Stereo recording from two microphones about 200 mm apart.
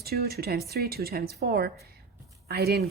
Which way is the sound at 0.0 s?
50° right (ahead or behind).